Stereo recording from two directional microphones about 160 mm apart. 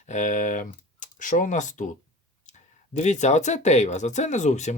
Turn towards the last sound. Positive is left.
turn(degrees=45)  # may be behind; listen again after turning